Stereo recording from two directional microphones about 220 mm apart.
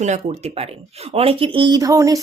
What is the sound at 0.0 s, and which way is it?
Speech, 30° right (ahead or behind).